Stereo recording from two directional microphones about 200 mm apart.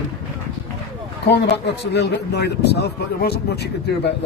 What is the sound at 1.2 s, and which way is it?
Speech, 55° left (ahead or behind).